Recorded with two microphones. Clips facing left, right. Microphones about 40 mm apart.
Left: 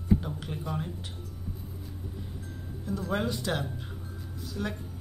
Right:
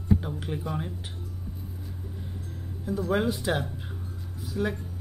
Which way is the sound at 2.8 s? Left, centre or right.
Centre.